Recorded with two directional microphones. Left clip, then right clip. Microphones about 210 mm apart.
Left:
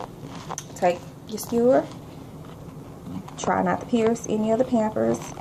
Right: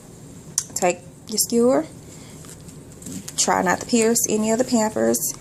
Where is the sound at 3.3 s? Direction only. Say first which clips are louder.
Right 4 dB; 35° right (ahead or behind).